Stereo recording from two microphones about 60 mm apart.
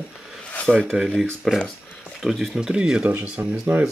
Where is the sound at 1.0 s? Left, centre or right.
Centre.